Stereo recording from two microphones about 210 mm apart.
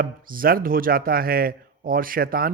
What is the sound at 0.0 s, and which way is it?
Speech, 45° right (ahead or behind).